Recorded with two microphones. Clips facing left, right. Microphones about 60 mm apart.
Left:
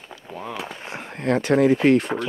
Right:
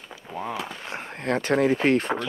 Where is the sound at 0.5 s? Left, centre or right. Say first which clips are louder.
Even; left.